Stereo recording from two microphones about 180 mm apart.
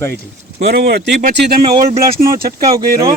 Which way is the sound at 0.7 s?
60° right (ahead or behind).